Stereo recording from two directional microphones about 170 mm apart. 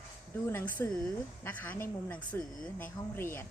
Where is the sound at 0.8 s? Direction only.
15° left (ahead or behind).